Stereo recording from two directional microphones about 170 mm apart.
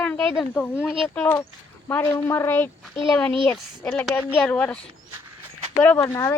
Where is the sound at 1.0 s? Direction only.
10° left (ahead or behind).